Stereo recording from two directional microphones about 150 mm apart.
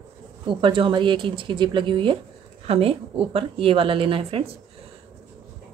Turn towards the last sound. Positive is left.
turn(degrees=-40)  # may be behind; listen again after turning